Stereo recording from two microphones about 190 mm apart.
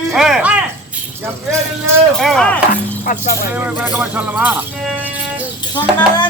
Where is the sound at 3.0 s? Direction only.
50° left (ahead or behind).